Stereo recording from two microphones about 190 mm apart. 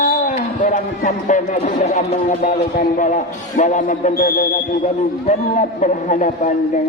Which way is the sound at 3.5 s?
40° left (ahead or behind).